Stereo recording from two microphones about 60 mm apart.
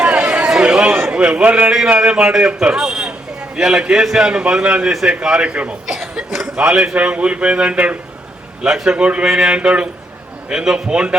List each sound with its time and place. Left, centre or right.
0.0 s chatter: right
1.0 s a man's voice: centre